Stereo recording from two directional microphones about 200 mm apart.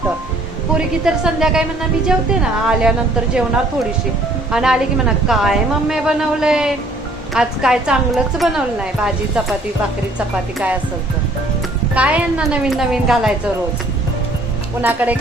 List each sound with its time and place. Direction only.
0.8 s a woman's voice: 5° right (ahead or behind)
4.5 s a woman's voice: 5° right (ahead or behind)
11.9 s a woman's voice: 5° right (ahead or behind)
14.8 s speech: 10° right (ahead or behind)